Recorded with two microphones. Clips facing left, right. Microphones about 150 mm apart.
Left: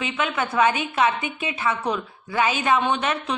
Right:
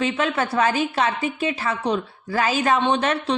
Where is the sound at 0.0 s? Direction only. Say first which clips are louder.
Right 3 dB; 35° right (ahead or behind).